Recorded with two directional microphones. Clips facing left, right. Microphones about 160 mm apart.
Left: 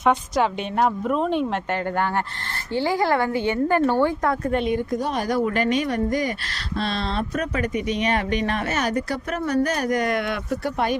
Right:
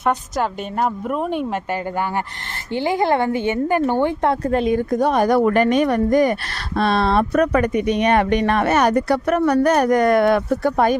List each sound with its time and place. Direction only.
0.0 s a woman's voice: centre (ahead or behind)
2.7 s a woman's voice: 20° right (ahead or behind); by 4.7 s 35° right (ahead or behind)
4.9 s speech: 60° right (ahead or behind)